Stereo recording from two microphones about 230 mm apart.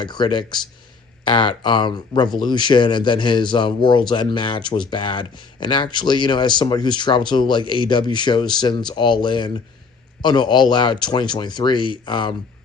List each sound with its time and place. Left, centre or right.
0.0 s speech: centre